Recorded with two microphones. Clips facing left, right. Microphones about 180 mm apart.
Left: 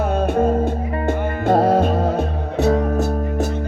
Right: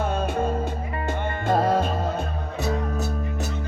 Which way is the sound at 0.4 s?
55° left (ahead or behind).